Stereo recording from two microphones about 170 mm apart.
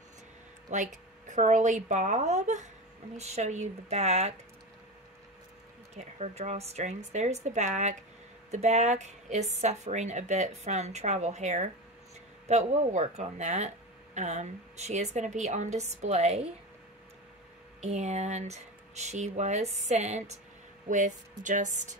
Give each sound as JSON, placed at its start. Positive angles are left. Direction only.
{"t": 0.7, "sound": "speech", "side_deg": -45}
{"t": 5.9, "sound": "speech", "side_deg": -40}
{"t": 17.7, "sound": "speech", "side_deg": -40}